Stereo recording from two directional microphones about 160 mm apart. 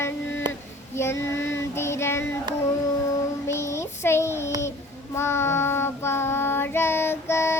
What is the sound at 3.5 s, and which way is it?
Child singing, 15° left (ahead or behind).